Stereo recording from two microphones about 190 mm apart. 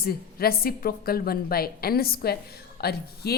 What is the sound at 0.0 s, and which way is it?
A woman's voice, 55° left (ahead or behind).